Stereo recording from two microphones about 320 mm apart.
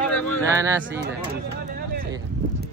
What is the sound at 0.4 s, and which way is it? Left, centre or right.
Speech, centre.